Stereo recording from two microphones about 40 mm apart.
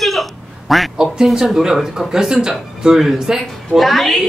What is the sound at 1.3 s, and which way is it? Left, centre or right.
Speech, centre.